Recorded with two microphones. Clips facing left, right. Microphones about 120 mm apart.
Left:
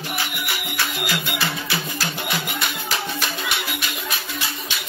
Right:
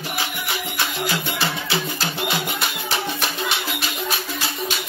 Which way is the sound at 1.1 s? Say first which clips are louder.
Right 1 dB; 25° right (ahead or behind).